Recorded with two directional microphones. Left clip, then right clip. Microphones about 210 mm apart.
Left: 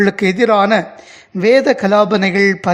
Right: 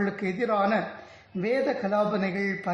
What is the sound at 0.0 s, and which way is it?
A man's voice, 40° left (ahead or behind).